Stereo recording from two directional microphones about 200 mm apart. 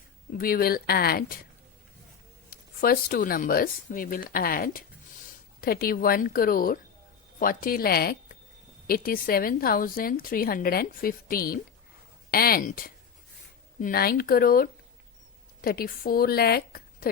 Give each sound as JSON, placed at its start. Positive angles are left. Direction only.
{"t": 0.3, "sound": "a woman's voice", "side_deg": 45}
{"t": 2.5, "sound": "a woman's voice", "side_deg": 45}